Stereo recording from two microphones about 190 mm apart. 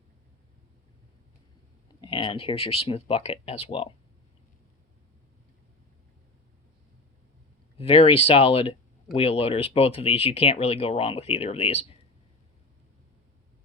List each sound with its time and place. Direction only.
1.9 s speech: 25° left (ahead or behind)
7.8 s speech: 30° left (ahead or behind)